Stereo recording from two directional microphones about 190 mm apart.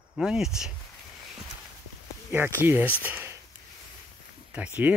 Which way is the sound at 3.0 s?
10° right (ahead or behind).